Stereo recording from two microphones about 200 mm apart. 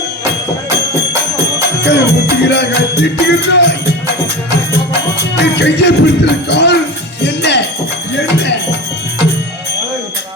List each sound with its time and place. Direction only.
1.6 s music: 55° left (ahead or behind)
4.9 s music: 60° left (ahead or behind)